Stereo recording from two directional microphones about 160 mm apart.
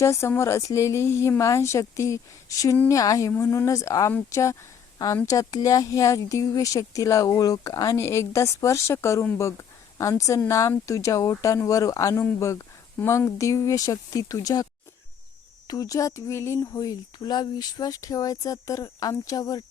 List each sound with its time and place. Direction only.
0.0 s speech: 15° left (ahead or behind)
2.7 s speech: 10° left (ahead or behind)
3.0 s speech: 20° left (ahead or behind)